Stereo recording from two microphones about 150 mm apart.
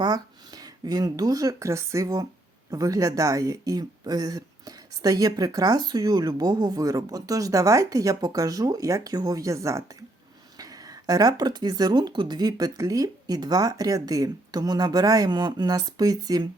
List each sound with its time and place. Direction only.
0.0 s speech: 25° right (ahead or behind)